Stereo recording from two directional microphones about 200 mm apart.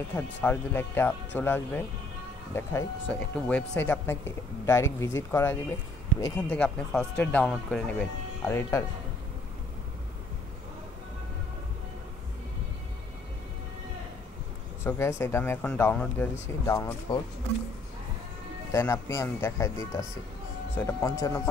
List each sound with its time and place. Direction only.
0.1 s speech: 10° left (ahead or behind)
14.8 s speech: 10° left (ahead or behind)
16.7 s speech: 20° left (ahead or behind)
18.7 s speech: 15° left (ahead or behind)